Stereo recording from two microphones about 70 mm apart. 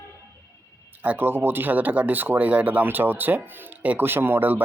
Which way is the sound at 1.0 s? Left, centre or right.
Right.